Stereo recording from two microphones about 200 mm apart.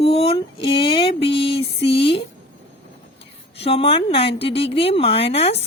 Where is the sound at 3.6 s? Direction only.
30° left (ahead or behind).